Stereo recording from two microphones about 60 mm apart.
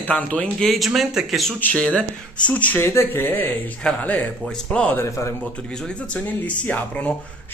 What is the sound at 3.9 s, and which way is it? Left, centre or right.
Speech, left.